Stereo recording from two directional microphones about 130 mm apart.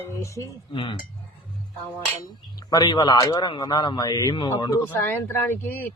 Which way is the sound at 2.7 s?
35° left (ahead or behind).